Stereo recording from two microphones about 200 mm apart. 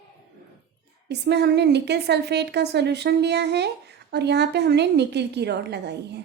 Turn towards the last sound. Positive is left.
turn(degrees=-55)  # may be behind; listen again after turning